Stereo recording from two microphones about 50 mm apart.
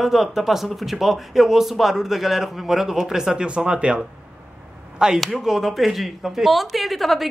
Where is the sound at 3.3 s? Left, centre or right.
Centre.